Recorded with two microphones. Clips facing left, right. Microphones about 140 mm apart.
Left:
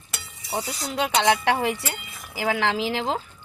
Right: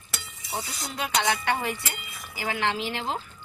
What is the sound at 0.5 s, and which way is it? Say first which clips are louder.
A woman's voice: left 6 dB; 80° left.